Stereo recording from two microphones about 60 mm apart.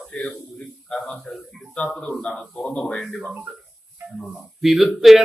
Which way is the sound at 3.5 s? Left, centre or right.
Centre.